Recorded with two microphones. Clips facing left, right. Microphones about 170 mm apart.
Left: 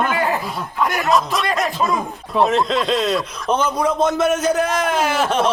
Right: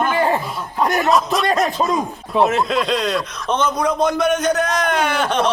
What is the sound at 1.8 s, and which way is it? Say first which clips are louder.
Speech: right 1 dB; 30° right (ahead or behind).